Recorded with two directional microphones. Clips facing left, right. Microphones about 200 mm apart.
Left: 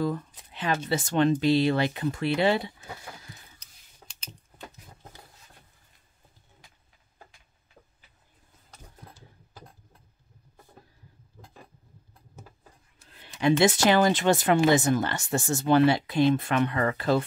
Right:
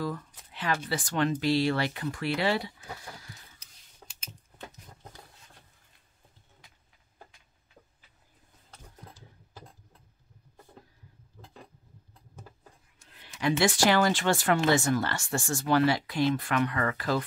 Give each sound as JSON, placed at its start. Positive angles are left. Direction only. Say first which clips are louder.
{"t": 0.0, "sound": "speech", "louder": "left 5 dB", "side_deg": 20}
{"t": 8.6, "sound": "engine", "louder": "even", "side_deg": 10}
{"t": 13.2, "sound": "a sound", "louder": "left 5 dB", "side_deg": 25}
{"t": 13.8, "sound": "speech", "louder": "left 1 dB", "side_deg": 20}